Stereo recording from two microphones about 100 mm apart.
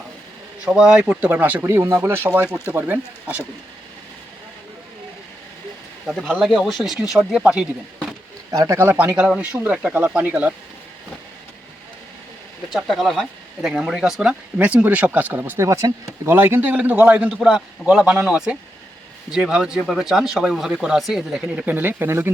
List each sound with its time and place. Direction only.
0.6 s speech: 10° right (ahead or behind)
6.1 s speech: centre (ahead or behind)
8.4 s speech: 35° right (ahead or behind)
8.8 s speech: 20° right (ahead or behind)
12.7 s speech: centre (ahead or behind); by 15.6 s 20° right (ahead or behind)
15.6 s speech: 30° right (ahead or behind)